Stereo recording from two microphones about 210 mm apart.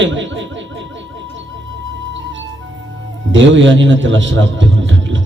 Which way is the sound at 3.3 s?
60° right (ahead or behind).